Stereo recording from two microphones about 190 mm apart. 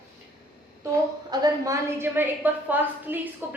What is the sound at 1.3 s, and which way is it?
A woman's voice, 20° right (ahead or behind).